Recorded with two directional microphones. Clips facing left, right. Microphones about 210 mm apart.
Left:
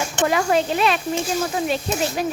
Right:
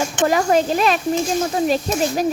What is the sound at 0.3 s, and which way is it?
Speech, 40° right (ahead or behind).